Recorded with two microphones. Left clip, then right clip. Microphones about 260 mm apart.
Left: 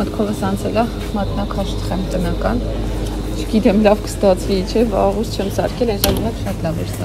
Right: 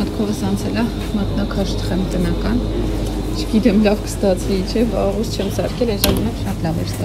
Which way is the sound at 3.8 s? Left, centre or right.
Left.